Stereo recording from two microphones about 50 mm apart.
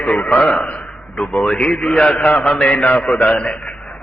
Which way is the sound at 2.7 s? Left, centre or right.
Left.